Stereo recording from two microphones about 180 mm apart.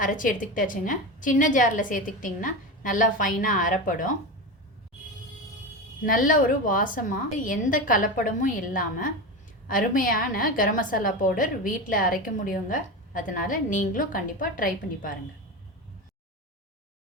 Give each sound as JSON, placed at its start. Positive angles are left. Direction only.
{"t": 0.0, "sound": "a woman's voice", "side_deg": 50}
{"t": 6.1, "sound": "a woman's voice", "side_deg": 50}